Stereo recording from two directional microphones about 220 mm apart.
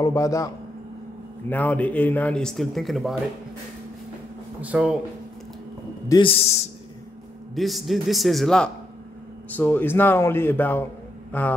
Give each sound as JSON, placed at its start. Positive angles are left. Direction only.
{"t": 0.0, "sound": "speech", "side_deg": 15}
{"t": 1.5, "sound": "speech", "side_deg": 10}
{"t": 4.6, "sound": "speech", "side_deg": -5}
{"t": 6.0, "sound": "a man's voice", "side_deg": 20}
{"t": 7.5, "sound": "speech", "side_deg": 0}